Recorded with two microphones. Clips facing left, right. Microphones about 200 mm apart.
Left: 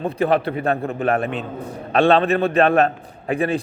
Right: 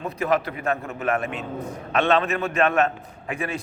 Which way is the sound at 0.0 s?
30° left (ahead or behind).